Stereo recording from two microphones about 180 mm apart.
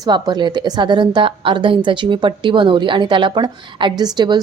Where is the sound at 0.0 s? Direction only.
25° right (ahead or behind).